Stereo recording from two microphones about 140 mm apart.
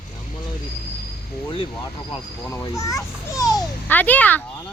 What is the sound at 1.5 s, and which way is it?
Speech, 40° left (ahead or behind).